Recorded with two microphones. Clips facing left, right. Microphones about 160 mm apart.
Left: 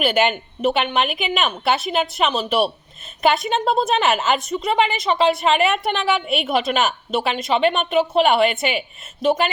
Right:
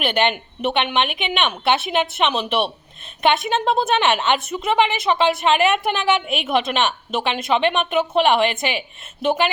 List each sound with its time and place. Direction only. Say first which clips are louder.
0.0 s a woman's voice: left 2 dB; 5° left (ahead or behind)